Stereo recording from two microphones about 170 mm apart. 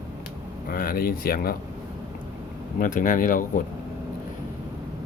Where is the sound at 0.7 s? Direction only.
55° left (ahead or behind).